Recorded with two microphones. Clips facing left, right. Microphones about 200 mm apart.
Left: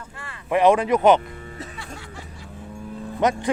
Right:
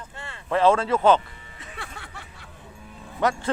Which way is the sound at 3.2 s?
20° left (ahead or behind).